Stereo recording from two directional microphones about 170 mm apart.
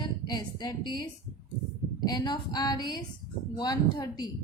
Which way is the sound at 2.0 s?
25° left (ahead or behind).